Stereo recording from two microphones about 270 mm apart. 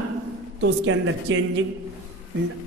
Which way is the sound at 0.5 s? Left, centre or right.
Right.